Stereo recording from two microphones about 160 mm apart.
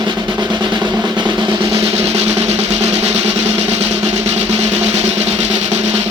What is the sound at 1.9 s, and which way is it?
Drum roll, 40° right (ahead or behind).